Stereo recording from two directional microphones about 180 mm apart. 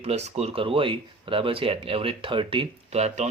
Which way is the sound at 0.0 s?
35° right (ahead or behind).